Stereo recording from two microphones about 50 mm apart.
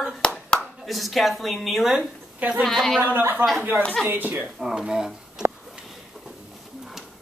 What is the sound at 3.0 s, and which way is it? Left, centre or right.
Speech, right.